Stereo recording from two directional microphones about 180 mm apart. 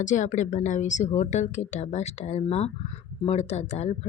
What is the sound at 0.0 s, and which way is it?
Speech, 45° left (ahead or behind).